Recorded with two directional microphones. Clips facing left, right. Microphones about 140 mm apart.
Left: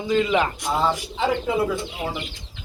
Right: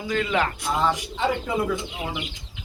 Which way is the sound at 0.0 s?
20° left (ahead or behind).